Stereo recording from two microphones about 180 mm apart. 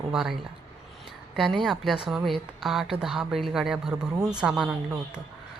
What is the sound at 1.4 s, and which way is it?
A woman's voice, centre (ahead or behind).